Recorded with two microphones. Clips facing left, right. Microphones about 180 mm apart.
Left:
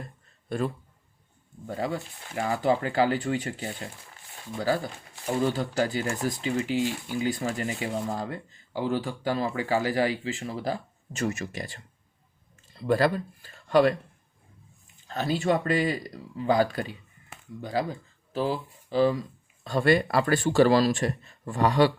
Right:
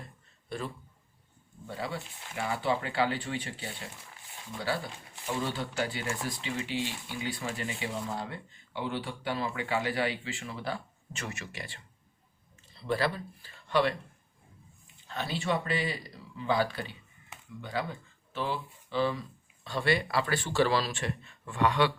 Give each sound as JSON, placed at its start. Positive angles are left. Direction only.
{"t": 0.4, "sound": "a man's voice", "side_deg": 50}
{"t": 5.2, "sound": "speech", "side_deg": 40}
{"t": 15.0, "sound": "speech", "side_deg": 40}